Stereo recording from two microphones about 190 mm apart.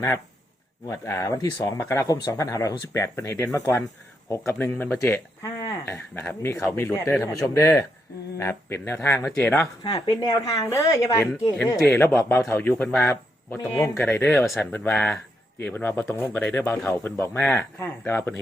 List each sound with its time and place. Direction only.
0.9 s speech: 15° left (ahead or behind)